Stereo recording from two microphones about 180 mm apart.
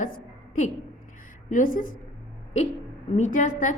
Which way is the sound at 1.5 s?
50° left (ahead or behind).